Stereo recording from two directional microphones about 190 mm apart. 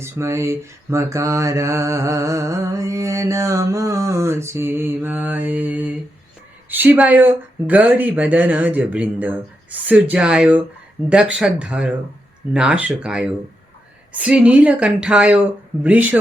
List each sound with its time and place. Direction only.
0.0 s mantra: 15° right (ahead or behind)
11.1 s speech: 5° right (ahead or behind)
14.1 s mantra: 5° right (ahead or behind)